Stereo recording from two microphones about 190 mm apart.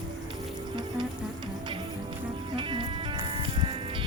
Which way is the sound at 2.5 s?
25° right (ahead or behind).